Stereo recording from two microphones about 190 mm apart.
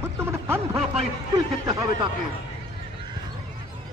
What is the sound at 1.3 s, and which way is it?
Speech, 20° right (ahead or behind).